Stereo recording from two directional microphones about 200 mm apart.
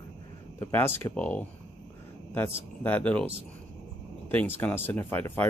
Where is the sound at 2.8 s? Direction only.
10° left (ahead or behind).